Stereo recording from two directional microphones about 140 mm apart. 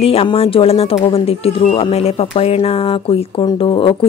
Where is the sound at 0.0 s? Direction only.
45° left (ahead or behind).